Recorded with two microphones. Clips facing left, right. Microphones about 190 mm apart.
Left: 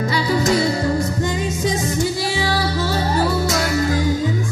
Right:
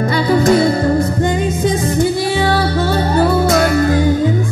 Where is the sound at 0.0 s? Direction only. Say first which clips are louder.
Right 6 dB; 55° right (ahead or behind).